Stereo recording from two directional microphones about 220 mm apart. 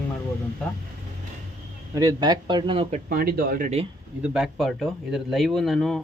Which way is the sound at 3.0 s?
45° right (ahead or behind).